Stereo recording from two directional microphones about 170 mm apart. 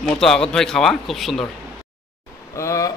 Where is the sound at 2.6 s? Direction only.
20° left (ahead or behind).